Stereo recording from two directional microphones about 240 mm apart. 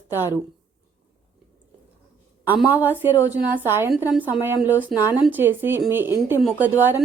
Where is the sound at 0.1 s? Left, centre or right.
Centre.